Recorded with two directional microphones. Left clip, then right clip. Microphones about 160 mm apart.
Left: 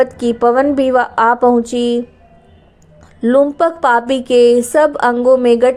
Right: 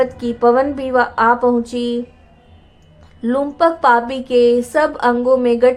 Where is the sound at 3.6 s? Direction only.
35° left (ahead or behind).